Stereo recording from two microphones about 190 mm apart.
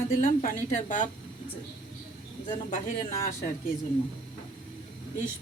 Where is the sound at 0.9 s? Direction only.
40° left (ahead or behind).